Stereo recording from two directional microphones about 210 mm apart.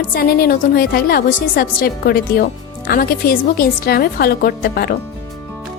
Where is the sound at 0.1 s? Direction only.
45° left (ahead or behind).